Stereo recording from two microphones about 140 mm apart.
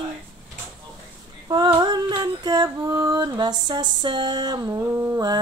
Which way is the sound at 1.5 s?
35° right (ahead or behind).